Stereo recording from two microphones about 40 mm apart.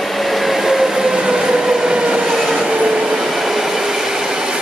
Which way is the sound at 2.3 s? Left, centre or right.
Centre.